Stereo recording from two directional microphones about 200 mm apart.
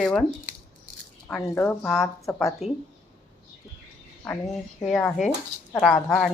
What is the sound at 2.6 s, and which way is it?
Speech, 35° left (ahead or behind).